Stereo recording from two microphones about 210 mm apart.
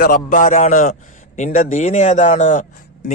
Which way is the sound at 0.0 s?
40° left (ahead or behind).